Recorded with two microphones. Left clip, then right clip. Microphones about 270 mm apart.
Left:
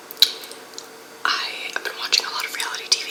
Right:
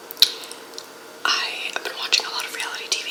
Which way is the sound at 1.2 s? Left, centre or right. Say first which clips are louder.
Right 1 dB; centre.